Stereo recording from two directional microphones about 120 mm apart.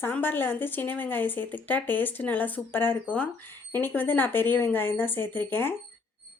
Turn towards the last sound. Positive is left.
turn(degrees=15)  # may be behind; listen again after turning